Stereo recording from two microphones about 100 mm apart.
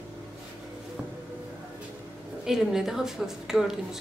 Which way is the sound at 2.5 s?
5° right (ahead or behind).